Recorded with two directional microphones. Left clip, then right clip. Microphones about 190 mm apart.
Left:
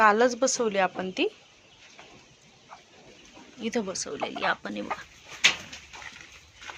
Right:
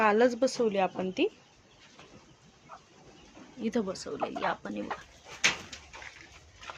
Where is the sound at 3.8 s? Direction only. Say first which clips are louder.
Left 2 dB; 5° right (ahead or behind).